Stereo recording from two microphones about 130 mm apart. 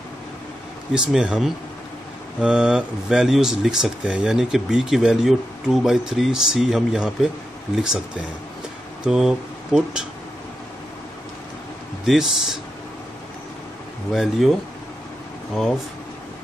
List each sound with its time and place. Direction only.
0.9 s speech: 5° right (ahead or behind)
9.0 s speech: 5° right (ahead or behind)
12.1 s speech: 5° right (ahead or behind)
14.1 s speech: centre (ahead or behind)